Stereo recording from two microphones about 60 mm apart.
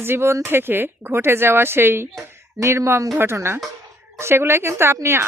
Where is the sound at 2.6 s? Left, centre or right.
Right.